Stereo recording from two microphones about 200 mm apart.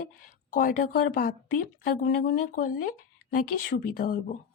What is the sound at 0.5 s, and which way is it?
Speech, 45° left (ahead or behind).